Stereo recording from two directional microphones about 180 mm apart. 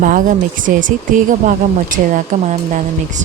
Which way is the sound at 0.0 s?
50° right (ahead or behind).